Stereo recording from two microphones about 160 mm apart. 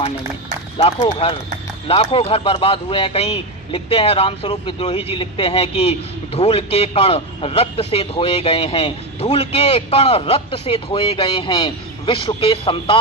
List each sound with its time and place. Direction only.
0.9 s speech: 30° left (ahead or behind)